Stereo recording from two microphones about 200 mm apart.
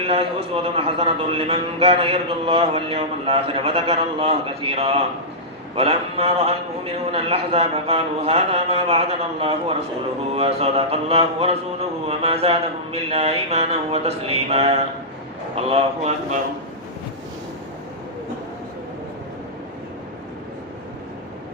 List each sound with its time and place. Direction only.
0.0 s a man's voice: 30° right (ahead or behind)